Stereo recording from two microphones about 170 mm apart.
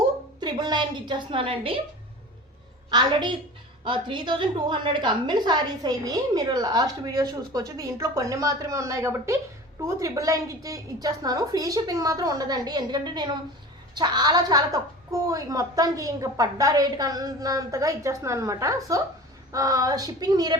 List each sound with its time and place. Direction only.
0.3 s a woman's voice: 25° right (ahead or behind)
2.9 s a woman's voice: 25° right (ahead or behind)